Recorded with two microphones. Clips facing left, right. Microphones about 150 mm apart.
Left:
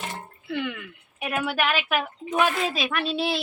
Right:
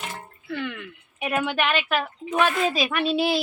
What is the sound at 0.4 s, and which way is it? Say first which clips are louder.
Speech: left 1 dB; 15° left (ahead or behind).